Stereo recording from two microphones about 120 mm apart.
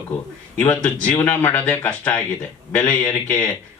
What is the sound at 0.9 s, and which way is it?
Speech, 15° left (ahead or behind).